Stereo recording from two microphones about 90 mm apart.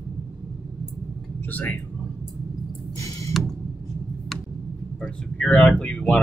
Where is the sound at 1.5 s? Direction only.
20° left (ahead or behind).